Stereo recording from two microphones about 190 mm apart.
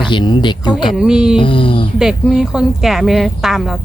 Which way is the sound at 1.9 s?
5° right (ahead or behind).